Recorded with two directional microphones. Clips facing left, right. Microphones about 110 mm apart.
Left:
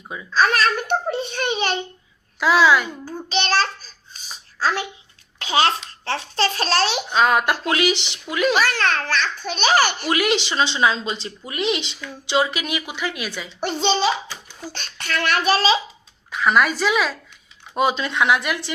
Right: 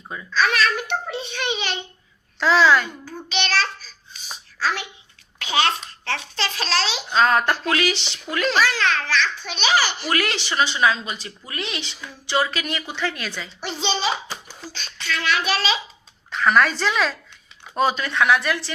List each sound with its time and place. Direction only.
0.3 s a child's voice: 40° left (ahead or behind)
2.4 s a woman's voice: 10° left (ahead or behind)
3.2 s child singing: 40° left (ahead or behind)
5.4 s a child's voice: 30° left (ahead or behind); by 7.0 s 50° left (ahead or behind)
7.1 s a woman's voice: 10° left (ahead or behind)
7.6 s a woman's voice: 20° left (ahead or behind)
8.6 s a child's voice: 50° left (ahead or behind)
10.1 s a woman's voice: 15° left (ahead or behind)
13.6 s a child's voice: 50° left (ahead or behind)
15.5 s child singing: 35° left (ahead or behind)
16.3 s a woman's voice: 10° left (ahead or behind)
17.7 s a woman's voice: 20° left (ahead or behind)